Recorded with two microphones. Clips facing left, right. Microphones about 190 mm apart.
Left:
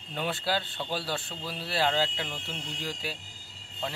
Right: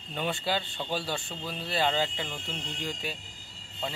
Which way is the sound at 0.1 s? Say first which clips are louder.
Even; centre (ahead or behind).